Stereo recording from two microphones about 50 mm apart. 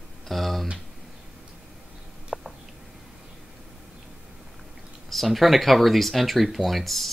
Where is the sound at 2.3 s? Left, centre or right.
Centre.